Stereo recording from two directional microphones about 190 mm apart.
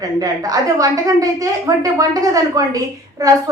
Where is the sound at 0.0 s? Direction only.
20° right (ahead or behind).